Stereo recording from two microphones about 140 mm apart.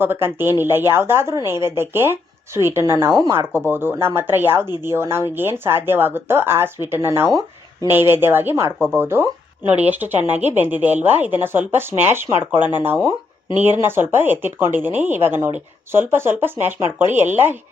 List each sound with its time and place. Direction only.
0.0 s speech: 15° right (ahead or behind)